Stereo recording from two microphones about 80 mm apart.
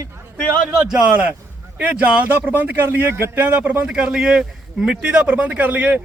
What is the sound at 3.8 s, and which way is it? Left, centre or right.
Speech, centre.